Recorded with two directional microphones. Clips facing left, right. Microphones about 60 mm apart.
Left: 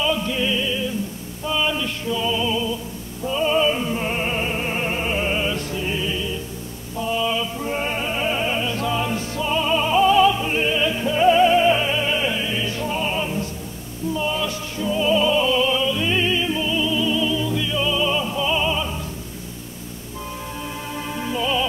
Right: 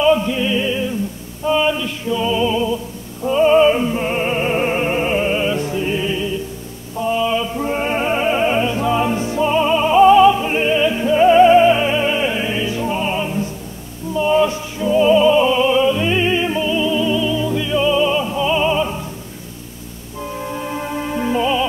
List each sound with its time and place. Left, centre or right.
0.0 s music: centre
1.4 s a sound: centre
2.0 s music: centre
3.3 s music: right
3.8 s music: centre
4.5 s music: right; by 5.6 s centre
5.6 s music: right
7.0 s mantra: centre
8.0 s music: right
12.6 s music: centre
14.3 s male singing: right
14.8 s music: centre
16.6 s music: centre
20.3 s music: right